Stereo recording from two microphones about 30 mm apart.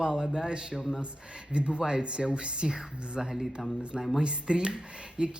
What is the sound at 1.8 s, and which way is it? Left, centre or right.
Speech, right.